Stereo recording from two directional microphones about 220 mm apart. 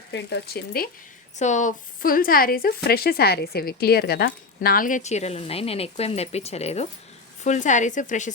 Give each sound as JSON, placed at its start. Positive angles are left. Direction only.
{"t": 0.1, "sound": "speech", "side_deg": 45}
{"t": 1.4, "sound": "a woman's voice", "side_deg": 35}